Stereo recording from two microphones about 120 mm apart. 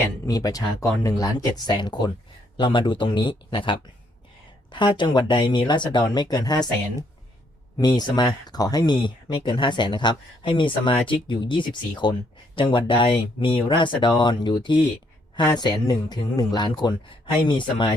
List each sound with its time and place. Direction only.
0.3 s speech: 30° left (ahead or behind)
7.8 s speech: 35° left (ahead or behind)